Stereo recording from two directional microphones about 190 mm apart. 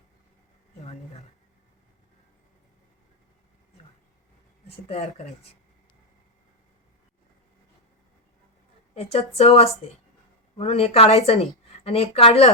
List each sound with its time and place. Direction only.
0.8 s a sound: 35° left (ahead or behind)
4.7 s speech: 30° left (ahead or behind)
9.0 s a woman's voice: 30° left (ahead or behind)